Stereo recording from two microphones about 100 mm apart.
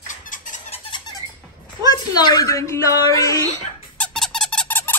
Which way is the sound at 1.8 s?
45° left (ahead or behind).